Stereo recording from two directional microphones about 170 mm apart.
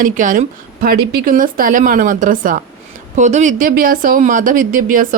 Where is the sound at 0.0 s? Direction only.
50° right (ahead or behind).